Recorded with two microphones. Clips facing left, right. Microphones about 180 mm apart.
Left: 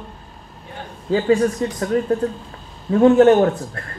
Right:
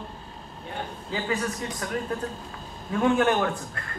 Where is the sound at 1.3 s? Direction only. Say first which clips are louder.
Left 12 dB; 40° left (ahead or behind).